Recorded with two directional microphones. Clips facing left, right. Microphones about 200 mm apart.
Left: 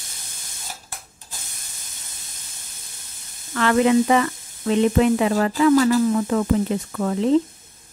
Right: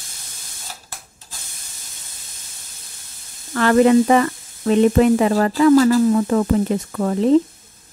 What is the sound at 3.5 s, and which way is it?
Speech, 45° right (ahead or behind).